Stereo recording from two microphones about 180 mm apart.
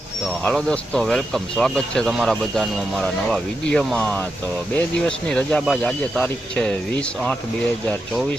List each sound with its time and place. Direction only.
0.4 s speech: 5° left (ahead or behind)